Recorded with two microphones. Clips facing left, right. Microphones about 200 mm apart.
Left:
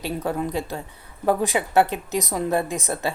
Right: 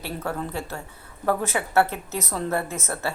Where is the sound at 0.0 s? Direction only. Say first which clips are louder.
Left 4 dB; 15° left (ahead or behind).